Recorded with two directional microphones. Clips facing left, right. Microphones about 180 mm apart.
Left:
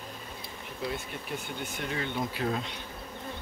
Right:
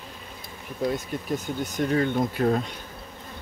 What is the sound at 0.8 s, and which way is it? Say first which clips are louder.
Speech: right 9 dB; 40° right (ahead or behind).